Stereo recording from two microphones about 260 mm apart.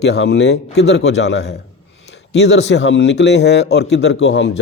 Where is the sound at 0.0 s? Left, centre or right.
Left.